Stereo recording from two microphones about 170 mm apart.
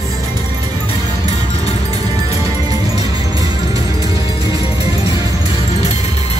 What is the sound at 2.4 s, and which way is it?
Music, 20° right (ahead or behind).